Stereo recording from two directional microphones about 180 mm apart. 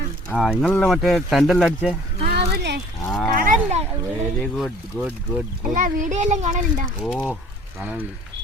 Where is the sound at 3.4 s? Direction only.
45° right (ahead or behind).